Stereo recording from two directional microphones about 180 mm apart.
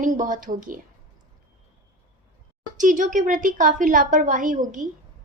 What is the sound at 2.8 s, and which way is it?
A woman's voice, 45° right (ahead or behind).